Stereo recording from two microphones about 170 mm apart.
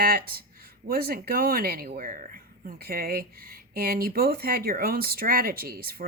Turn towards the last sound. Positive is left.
turn(degrees=-65)  # may be behind; listen again after turning